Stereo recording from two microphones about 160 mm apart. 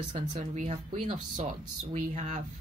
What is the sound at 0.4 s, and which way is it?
Speech, 45° right (ahead or behind).